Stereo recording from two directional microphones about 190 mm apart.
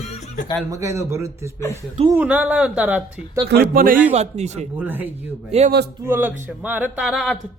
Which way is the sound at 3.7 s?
45° right (ahead or behind).